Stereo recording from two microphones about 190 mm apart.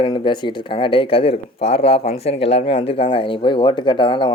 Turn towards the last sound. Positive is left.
turn(degrees=25)  # may be behind; listen again after turning